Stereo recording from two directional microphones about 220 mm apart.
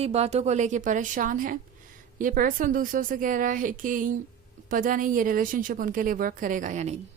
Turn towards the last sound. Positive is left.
turn(degrees=-35)  # may be behind; listen again after turning